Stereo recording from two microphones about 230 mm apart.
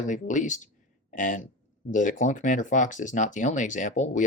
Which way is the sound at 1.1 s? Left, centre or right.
Left.